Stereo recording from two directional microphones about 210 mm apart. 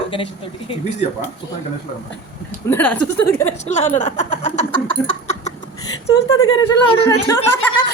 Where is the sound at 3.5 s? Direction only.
35° left (ahead or behind).